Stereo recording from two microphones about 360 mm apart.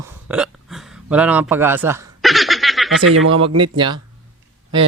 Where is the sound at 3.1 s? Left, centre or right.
Right.